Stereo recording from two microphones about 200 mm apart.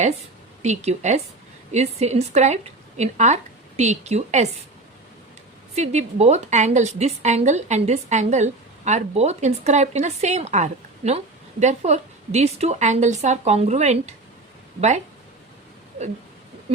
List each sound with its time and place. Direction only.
0.6 s a woman's voice: 35° right (ahead or behind)
5.7 s a woman's voice: 35° right (ahead or behind)